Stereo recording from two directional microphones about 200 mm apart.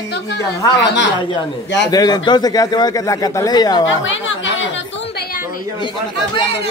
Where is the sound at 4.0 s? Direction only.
70° left (ahead or behind).